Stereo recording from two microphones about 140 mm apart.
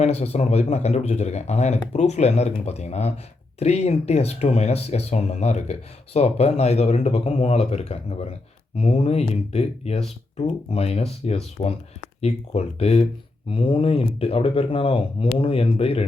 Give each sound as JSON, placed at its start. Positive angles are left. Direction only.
{"t": 0.0, "sound": "speech", "side_deg": 50}
{"t": 13.5, "sound": "speech", "side_deg": 40}